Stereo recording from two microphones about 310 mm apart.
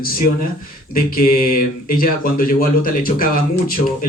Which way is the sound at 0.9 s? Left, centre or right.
Left.